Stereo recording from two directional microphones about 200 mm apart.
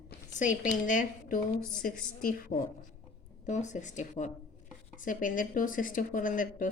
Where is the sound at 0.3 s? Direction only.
40° left (ahead or behind).